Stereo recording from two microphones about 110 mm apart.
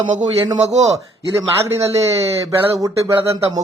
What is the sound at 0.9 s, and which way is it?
A man's voice, 30° right (ahead or behind).